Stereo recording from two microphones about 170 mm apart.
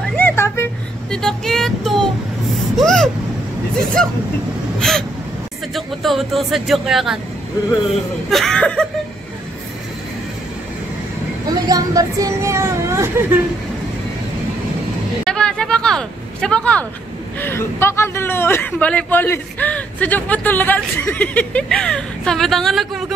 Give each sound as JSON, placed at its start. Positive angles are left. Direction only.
{"t": 0.1, "sound": "vehicle", "side_deg": 15}
{"t": 1.1, "sound": "child singing", "side_deg": 5}
{"t": 2.8, "sound": "speech", "side_deg": 5}
{"t": 4.7, "sound": "vehicle", "side_deg": 5}
{"t": 5.8, "sound": "speech", "side_deg": 0}
{"t": 8.3, "sound": "speech", "side_deg": 0}
{"t": 11.5, "sound": "speech", "side_deg": -20}
{"t": 15.2, "sound": "a sound", "side_deg": 5}
{"t": 17.4, "sound": "a woman's voice", "side_deg": 15}